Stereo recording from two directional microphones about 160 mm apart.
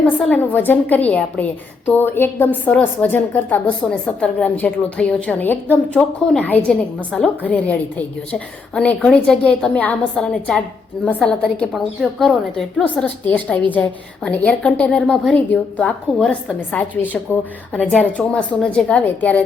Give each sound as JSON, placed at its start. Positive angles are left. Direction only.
{"t": 0.2, "sound": "a woman's voice", "side_deg": 10}